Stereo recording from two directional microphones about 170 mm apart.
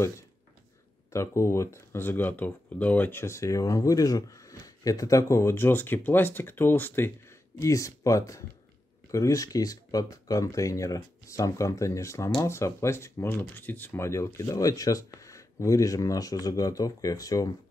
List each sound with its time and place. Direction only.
1.1 s speech: 15° left (ahead or behind)